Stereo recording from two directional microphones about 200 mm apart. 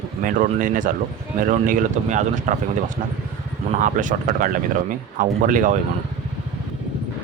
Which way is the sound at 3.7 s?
40° right (ahead or behind).